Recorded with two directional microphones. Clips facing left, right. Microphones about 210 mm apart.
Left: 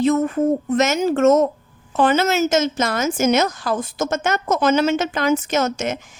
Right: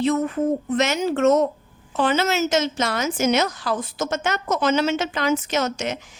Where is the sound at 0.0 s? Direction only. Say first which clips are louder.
Left 3 dB; 45° left (ahead or behind).